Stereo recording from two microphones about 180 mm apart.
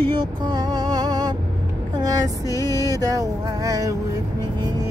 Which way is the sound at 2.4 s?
20° left (ahead or behind).